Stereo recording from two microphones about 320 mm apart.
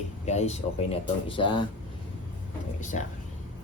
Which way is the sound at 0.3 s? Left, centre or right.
Centre.